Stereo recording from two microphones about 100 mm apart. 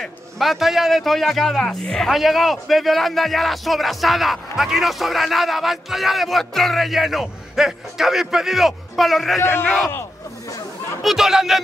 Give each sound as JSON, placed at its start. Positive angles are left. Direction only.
{"t": 0.0, "sound": "a man's voice", "side_deg": 0}
{"t": 9.4, "sound": "speech", "side_deg": 25}
{"t": 11.0, "sound": "a man's voice", "side_deg": -5}